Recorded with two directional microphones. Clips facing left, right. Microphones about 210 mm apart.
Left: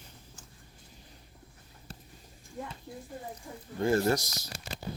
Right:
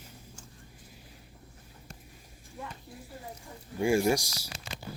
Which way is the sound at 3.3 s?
10° right (ahead or behind).